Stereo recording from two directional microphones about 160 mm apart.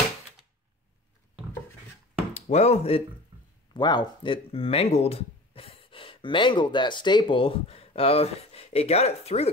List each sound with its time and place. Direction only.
2.3 s speech: 45° left (ahead or behind)
3.7 s speech: 25° left (ahead or behind)